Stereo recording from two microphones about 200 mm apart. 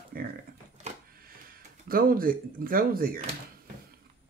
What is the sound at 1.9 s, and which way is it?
Speech, 45° right (ahead or behind).